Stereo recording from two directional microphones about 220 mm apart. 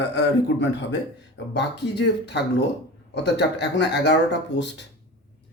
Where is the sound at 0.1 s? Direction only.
50° left (ahead or behind).